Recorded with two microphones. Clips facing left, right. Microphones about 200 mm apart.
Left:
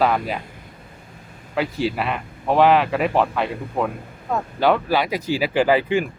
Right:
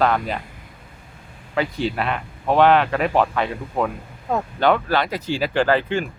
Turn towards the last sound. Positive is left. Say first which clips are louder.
# left 2 dB
turn(degrees=10)  # may be behind; listen again after turning